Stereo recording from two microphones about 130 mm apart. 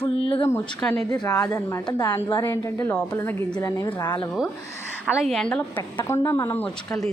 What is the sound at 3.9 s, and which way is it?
Speech, 30° left (ahead or behind).